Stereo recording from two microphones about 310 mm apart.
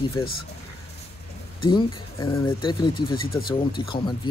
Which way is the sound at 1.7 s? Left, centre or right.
Centre.